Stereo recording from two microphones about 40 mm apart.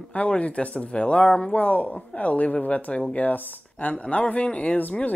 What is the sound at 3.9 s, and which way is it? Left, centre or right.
Speech, left.